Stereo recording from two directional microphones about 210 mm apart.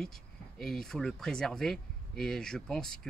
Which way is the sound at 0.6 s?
Centre (ahead or behind).